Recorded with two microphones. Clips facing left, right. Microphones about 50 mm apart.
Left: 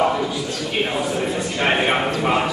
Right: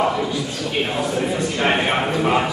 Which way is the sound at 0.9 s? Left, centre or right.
Centre.